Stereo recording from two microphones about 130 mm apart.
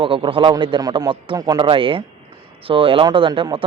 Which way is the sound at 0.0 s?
40° right (ahead or behind).